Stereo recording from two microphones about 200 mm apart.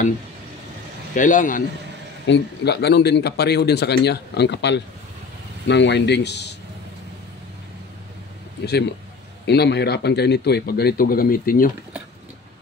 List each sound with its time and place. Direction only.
1.1 s a man's voice: 40° left (ahead or behind)
2.2 s speech: 55° left (ahead or behind)
9.5 s speech: 55° left (ahead or behind)